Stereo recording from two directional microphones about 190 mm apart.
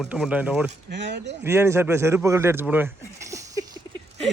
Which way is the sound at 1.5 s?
15° right (ahead or behind).